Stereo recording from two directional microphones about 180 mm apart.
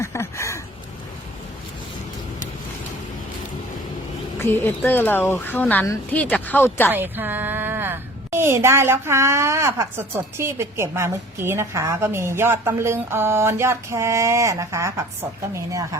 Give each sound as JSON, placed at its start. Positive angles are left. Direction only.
{"t": 0.0, "sound": "a sound", "side_deg": 15}
{"t": 4.4, "sound": "a woman's voice", "side_deg": 15}
{"t": 6.9, "sound": "a woman's voice", "side_deg": -10}